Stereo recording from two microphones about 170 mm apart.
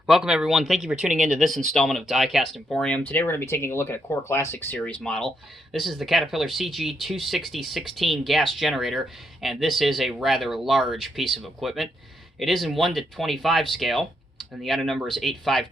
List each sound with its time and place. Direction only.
0.0 s speech: 5° right (ahead or behind)